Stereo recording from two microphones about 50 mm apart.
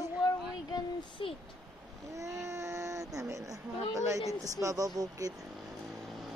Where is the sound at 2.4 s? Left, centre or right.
Right.